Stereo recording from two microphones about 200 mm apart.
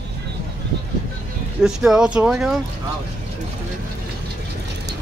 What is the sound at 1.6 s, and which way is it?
Speech, 5° right (ahead or behind).